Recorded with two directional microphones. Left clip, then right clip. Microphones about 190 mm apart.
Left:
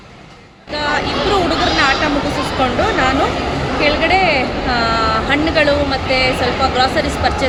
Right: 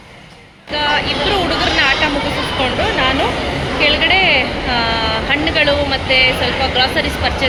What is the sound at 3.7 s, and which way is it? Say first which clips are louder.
A woman's voice: right 1 dB; 10° left (ahead or behind).